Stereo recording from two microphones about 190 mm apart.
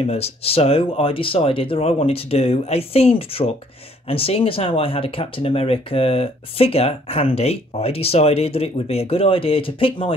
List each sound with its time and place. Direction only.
0.0 s speech: 30° left (ahead or behind)